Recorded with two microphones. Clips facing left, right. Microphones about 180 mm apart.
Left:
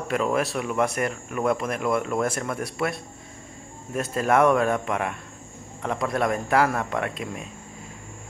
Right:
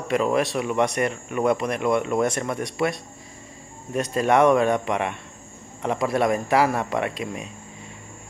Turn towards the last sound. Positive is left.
turn(degrees=0)  # may be behind; listen again after turning